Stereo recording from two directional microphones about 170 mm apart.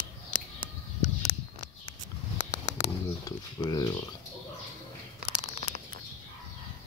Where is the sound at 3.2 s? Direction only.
25° left (ahead or behind).